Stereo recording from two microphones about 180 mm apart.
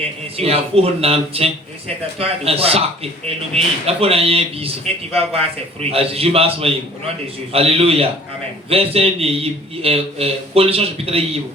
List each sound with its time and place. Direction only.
0.3 s speech: 35° right (ahead or behind)
5.9 s speech: 30° right (ahead or behind)